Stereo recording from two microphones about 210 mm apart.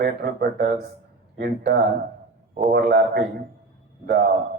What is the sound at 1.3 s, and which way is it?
Speech, 50° right (ahead or behind).